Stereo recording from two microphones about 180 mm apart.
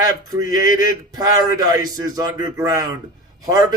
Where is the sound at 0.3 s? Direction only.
20° right (ahead or behind).